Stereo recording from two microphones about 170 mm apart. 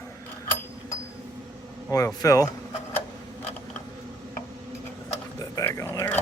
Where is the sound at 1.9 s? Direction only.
20° left (ahead or behind).